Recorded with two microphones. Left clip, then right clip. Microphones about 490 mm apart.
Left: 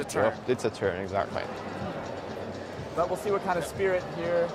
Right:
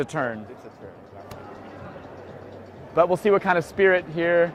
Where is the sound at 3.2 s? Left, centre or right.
Right.